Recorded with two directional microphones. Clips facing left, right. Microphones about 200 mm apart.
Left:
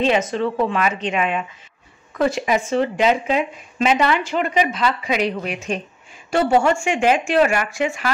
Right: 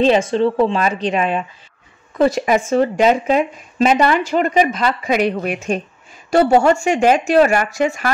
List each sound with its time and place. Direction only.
0.0 s speech: 30° right (ahead or behind); by 5.8 s 50° right (ahead or behind)
6.3 s speech: 40° right (ahead or behind)